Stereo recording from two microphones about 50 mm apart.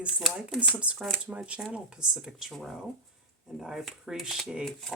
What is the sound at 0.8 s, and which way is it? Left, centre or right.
Speech, right.